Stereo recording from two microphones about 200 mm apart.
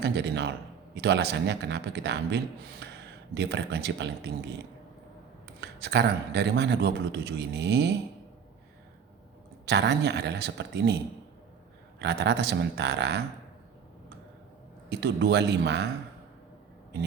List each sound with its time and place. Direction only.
0.0 s a man's voice: 60° right (ahead or behind)
5.5 s a man's voice: 55° right (ahead or behind)
9.6 s a man's voice: 60° right (ahead or behind)
14.8 s a man's voice: 60° right (ahead or behind)